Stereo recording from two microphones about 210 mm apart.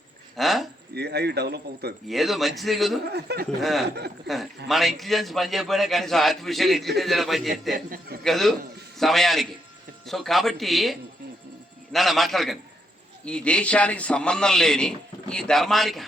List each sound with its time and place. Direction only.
0.3 s a sound: centre (ahead or behind)
0.9 s speech: 50° right (ahead or behind)
2.0 s a man's voice: centre (ahead or behind)
3.0 s speech: 50° right (ahead or behind)
3.6 s a man's voice: centre (ahead or behind)
3.8 s speech: 50° right (ahead or behind)
4.7 s a man's voice: centre (ahead or behind)
7.9 s speech: 45° right (ahead or behind)
8.2 s a man's voice: centre (ahead or behind)